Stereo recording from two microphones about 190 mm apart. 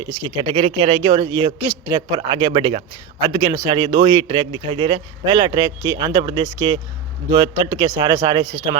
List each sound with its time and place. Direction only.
0.3 s a man's voice: 35° right (ahead or behind)